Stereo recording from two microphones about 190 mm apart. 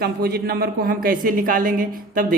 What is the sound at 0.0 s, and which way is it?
Speech, 55° right (ahead or behind).